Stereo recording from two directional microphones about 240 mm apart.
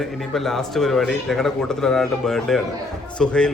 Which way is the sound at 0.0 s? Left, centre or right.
Centre.